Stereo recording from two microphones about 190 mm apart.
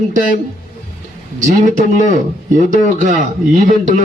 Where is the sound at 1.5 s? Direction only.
40° right (ahead or behind).